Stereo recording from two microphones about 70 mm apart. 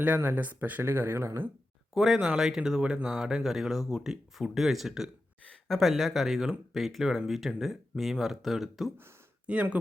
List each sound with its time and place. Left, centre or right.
0.2 s speech: right
1.9 s speech: centre
9.5 s speech: centre